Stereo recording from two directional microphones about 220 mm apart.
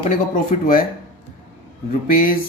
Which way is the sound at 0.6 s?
40° left (ahead or behind).